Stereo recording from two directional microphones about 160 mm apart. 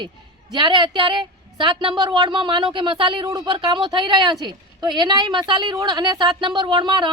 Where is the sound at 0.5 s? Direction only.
30° right (ahead or behind).